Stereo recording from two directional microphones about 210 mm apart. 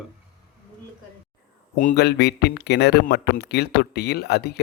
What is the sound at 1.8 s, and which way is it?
Speech, 45° left (ahead or behind).